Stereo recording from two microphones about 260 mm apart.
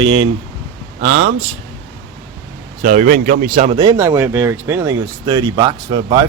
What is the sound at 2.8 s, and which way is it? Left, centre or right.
Speech, right.